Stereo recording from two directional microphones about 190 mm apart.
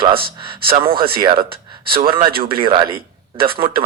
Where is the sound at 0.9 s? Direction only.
50° right (ahead or behind).